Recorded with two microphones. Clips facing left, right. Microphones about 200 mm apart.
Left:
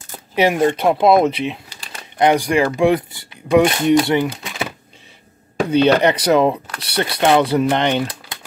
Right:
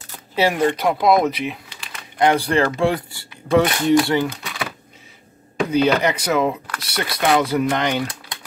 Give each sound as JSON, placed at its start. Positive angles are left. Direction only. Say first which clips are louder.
{"t": 0.4, "sound": "speech", "louder": "left 3 dB", "side_deg": 20}